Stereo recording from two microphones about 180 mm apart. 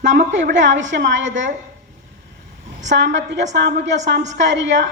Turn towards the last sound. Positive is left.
turn(degrees=-85)